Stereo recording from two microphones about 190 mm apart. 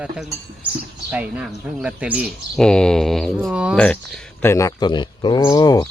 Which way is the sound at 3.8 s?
5° left (ahead or behind).